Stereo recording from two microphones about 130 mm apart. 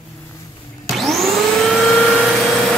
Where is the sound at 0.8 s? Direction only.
Centre (ahead or behind).